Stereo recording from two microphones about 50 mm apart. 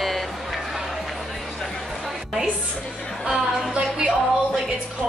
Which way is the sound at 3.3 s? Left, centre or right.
Centre.